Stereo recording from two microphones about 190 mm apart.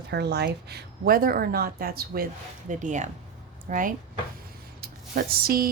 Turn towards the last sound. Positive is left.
turn(degrees=-50)  # may be behind; listen again after turning